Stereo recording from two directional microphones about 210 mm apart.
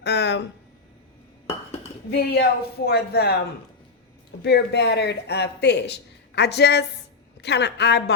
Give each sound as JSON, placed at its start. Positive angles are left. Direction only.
{"t": 0.0, "sound": "speech", "side_deg": 55}
{"t": 2.0, "sound": "speech", "side_deg": 50}
{"t": 4.4, "sound": "speech", "side_deg": 50}